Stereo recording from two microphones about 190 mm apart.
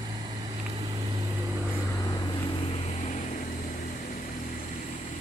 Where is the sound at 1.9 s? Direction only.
20° left (ahead or behind); by 3.4 s 40° left (ahead or behind).